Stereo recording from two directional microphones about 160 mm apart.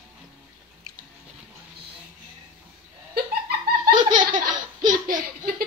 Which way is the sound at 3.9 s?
30° right (ahead or behind).